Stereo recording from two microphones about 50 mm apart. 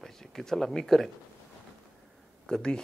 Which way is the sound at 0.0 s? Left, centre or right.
Centre.